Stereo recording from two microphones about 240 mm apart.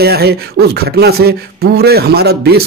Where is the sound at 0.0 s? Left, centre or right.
Right.